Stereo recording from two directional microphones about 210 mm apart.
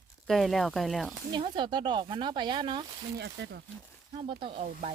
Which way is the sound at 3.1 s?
50° right (ahead or behind).